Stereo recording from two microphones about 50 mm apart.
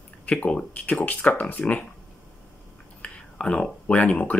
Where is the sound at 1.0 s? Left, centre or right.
Left.